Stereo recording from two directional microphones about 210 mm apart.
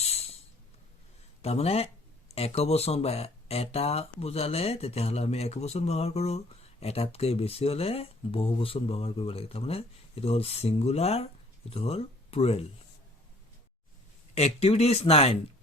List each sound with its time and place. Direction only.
0.0 s a sound: 30° left (ahead or behind)
1.4 s speech: 30° left (ahead or behind)
14.3 s speech: 30° left (ahead or behind)